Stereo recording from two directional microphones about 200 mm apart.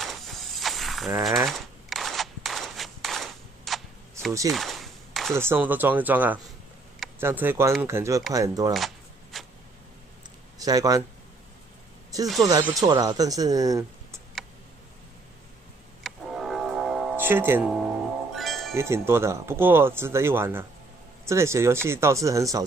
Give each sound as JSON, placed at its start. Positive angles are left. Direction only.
{"t": 0.0, "sound": "a sound", "side_deg": 0}
{"t": 1.9, "sound": "cap gun", "side_deg": 0}
{"t": 4.5, "sound": "a sound", "side_deg": 0}
{"t": 5.3, "sound": "speech", "side_deg": -10}
{"t": 8.7, "sound": "shuffling cards", "side_deg": 0}
{"t": 10.6, "sound": "speech", "side_deg": -20}
{"t": 12.4, "sound": "speech", "side_deg": -15}
{"t": 16.0, "sound": "music", "side_deg": 0}
{"t": 18.8, "sound": "speech", "side_deg": -15}